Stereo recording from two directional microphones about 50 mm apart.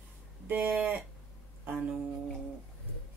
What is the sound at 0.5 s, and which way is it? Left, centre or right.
Speech, right.